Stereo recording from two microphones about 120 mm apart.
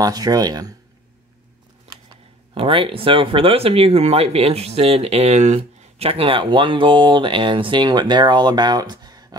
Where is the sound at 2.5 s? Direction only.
50° right (ahead or behind); by 5.6 s 65° right (ahead or behind).